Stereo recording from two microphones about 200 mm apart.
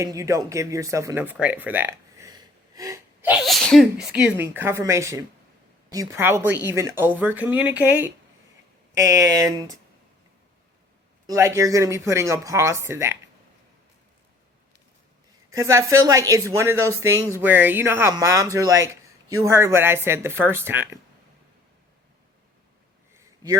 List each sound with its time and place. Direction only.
0.0 s speech: 15° right (ahead or behind)
11.3 s speech: 15° right (ahead or behind)
15.5 s speech: 15° right (ahead or behind)
23.1 s a sound: 20° right (ahead or behind)